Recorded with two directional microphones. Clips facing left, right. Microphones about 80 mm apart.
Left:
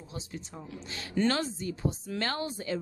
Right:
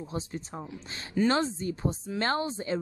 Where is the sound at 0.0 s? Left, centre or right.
Right.